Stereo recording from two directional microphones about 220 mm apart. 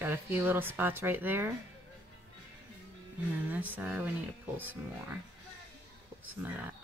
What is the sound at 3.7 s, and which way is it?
A woman's voice, 5° right (ahead or behind).